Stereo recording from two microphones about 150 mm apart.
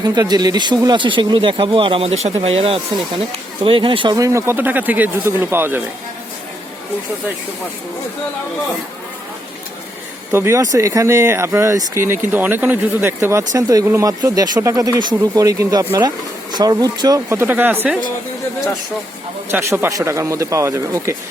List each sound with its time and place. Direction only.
0.0 s speech: 25° right (ahead or behind)
10.3 s speech: 20° right (ahead or behind)
19.5 s speech: 15° right (ahead or behind)